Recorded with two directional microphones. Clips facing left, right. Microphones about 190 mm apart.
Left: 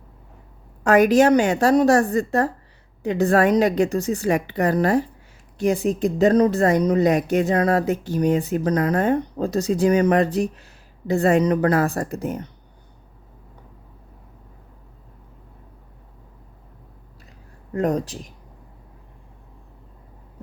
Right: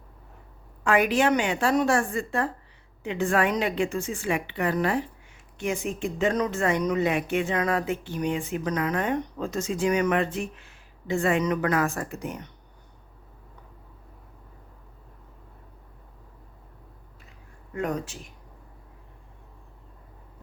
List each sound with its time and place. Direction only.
0.9 s speech: 40° left (ahead or behind)
17.7 s speech: 35° left (ahead or behind)